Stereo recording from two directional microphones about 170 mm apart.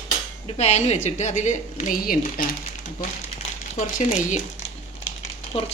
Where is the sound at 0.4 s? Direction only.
40° left (ahead or behind); by 2.5 s 55° left (ahead or behind).